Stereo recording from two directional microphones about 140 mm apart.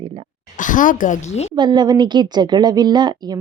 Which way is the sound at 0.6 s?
70° left (ahead or behind).